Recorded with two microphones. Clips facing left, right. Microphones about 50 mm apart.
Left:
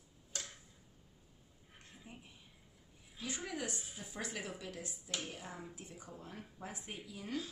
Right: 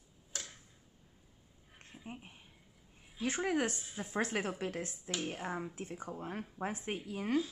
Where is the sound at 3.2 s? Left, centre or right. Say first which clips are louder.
Right 9 dB; right.